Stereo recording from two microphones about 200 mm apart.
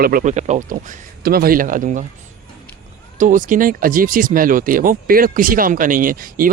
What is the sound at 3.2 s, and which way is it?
Speech, 40° right (ahead or behind).